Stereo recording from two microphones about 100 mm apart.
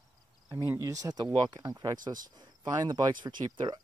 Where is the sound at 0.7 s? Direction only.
35° right (ahead or behind).